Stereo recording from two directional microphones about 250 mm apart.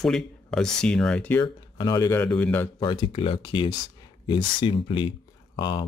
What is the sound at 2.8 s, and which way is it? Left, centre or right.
Speech, centre.